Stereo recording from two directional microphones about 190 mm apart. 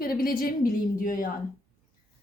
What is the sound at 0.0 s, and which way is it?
A woman's voice, 50° left (ahead or behind).